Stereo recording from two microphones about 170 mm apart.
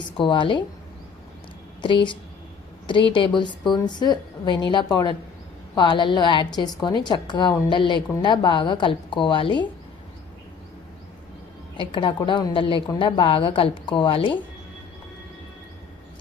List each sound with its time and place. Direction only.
0.2 s a woman's voice: 30° left (ahead or behind)
1.8 s a woman's voice: 30° left (ahead or behind)
11.8 s a woman's voice: 30° left (ahead or behind)